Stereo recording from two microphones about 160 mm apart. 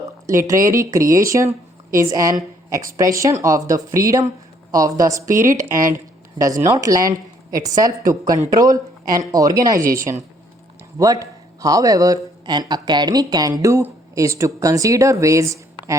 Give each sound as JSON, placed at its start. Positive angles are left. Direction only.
{"t": 0.3, "sound": "speech", "side_deg": -20}